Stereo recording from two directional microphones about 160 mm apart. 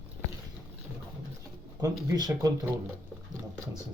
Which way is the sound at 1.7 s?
25° right (ahead or behind).